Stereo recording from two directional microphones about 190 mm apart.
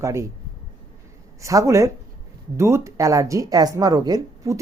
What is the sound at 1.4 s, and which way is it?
Speech, 15° right (ahead or behind).